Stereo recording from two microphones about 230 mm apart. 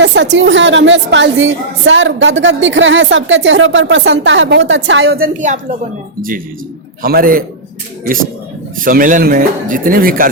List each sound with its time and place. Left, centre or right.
0.0 s a woman's voice: right
7.0 s speech: right
8.8 s speech: right